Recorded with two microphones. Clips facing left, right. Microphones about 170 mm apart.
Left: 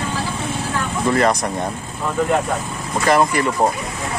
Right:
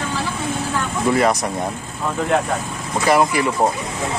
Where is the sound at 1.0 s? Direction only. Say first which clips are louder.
Even; 5° right (ahead or behind).